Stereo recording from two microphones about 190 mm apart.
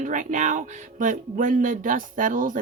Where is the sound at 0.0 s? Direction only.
40° right (ahead or behind).